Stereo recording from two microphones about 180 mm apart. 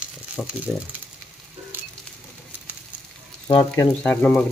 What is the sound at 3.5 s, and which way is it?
Frying, 30° left (ahead or behind).